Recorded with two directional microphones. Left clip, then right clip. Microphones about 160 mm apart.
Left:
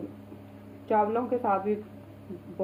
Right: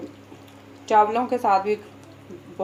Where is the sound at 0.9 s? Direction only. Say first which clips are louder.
Right 7 dB; 20° right (ahead or behind).